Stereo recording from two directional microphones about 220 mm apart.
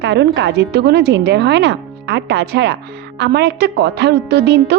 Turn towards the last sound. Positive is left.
turn(degrees=-50)  # may be behind; listen again after turning